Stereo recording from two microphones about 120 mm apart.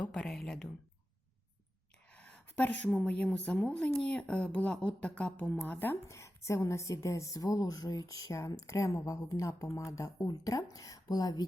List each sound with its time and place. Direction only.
0.0 s speech: 10° left (ahead or behind)
2.1 s a sound: 10° left (ahead or behind)
3.2 s a woman's voice: 10° left (ahead or behind); by 11.4 s 30° left (ahead or behind)